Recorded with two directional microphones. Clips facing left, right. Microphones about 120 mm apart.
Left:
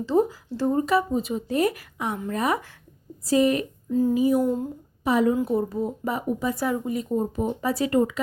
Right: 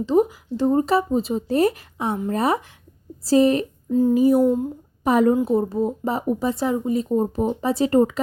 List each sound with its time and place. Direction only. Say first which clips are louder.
0.0 s speech: right 3 dB; 15° right (ahead or behind)
0.8 s speech: right 3 dB; 30° right (ahead or behind)
4.1 s a woman's voice: right 6 dB; 40° right (ahead or behind)
5.4 s speech: right 4 dB; 25° right (ahead or behind)
7.9 s speech: right 5 dB; 40° right (ahead or behind)